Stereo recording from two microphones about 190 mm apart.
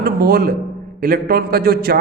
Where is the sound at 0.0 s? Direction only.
50° right (ahead or behind).